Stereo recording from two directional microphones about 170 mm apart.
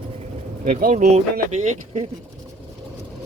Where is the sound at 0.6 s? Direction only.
50° right (ahead or behind).